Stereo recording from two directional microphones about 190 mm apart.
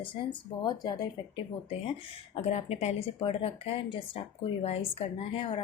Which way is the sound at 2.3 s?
35° left (ahead or behind).